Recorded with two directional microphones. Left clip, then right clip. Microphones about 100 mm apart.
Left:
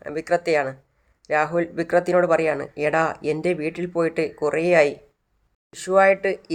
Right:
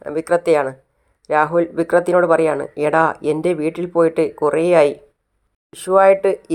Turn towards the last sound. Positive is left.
turn(degrees=-25)  # may be behind; listen again after turning